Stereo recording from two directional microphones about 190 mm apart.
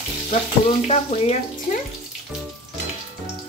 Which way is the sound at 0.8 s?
30° left (ahead or behind).